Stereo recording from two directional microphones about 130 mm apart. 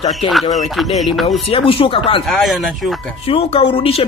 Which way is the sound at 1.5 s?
45° left (ahead or behind).